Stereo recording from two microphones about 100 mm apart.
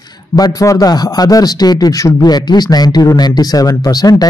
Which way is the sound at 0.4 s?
40° left (ahead or behind).